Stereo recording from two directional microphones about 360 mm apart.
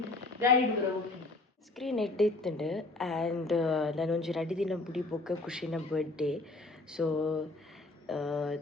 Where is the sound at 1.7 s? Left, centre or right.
Centre.